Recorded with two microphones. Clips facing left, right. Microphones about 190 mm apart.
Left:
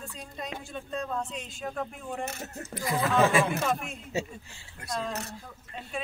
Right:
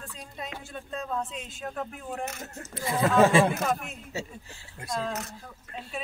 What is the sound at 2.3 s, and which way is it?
Speech, 30° left (ahead or behind).